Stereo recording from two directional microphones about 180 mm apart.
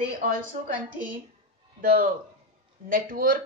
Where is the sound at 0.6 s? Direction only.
40° right (ahead or behind).